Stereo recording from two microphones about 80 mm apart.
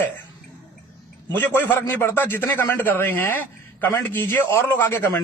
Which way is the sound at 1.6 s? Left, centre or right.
Left.